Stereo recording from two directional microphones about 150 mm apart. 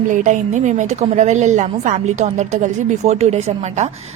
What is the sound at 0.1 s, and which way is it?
A woman's voice, 55° right (ahead or behind).